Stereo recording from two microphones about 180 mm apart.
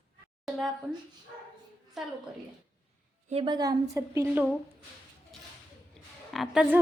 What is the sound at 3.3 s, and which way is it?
A woman's voice, 30° right (ahead or behind).